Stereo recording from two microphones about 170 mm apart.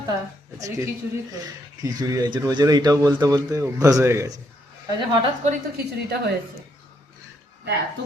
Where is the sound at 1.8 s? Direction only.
20° right (ahead or behind).